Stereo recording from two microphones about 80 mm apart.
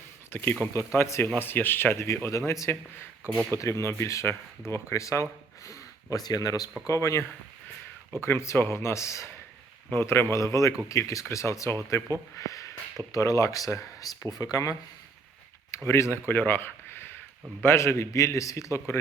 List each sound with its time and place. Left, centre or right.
0.3 s speech: left
6.8 s speech: left
10.3 s speech: left
12.4 s a sound: left
13.1 s speech: left
15.7 s speech: left